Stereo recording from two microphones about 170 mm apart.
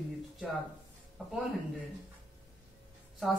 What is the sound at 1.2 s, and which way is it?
Speech, centre (ahead or behind).